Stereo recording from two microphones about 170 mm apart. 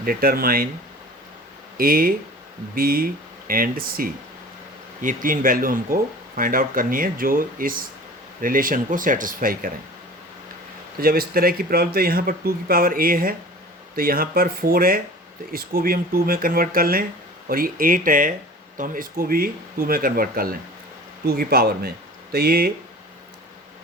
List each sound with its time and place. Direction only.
0.0 s speech: 60° right (ahead or behind)
1.8 s speech: 60° right (ahead or behind)
11.0 s speech: 60° right (ahead or behind)